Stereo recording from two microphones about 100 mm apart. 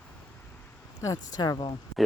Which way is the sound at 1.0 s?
35° left (ahead or behind).